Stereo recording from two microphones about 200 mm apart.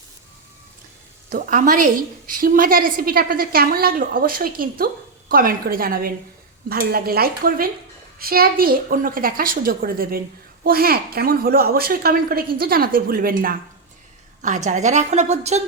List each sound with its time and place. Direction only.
1.3 s a woman's voice: 40° right (ahead or behind)